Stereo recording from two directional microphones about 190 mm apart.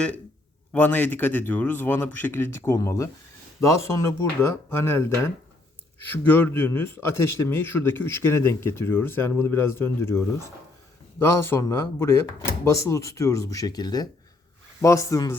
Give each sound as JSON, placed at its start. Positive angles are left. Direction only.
{"t": 0.7, "sound": "a man's voice", "side_deg": 10}